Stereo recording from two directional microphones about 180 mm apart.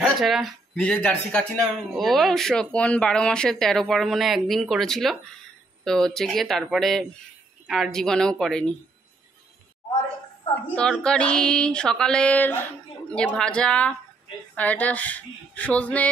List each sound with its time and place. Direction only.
0.0 s speech: centre (ahead or behind)
10.7 s speech: 5° left (ahead or behind)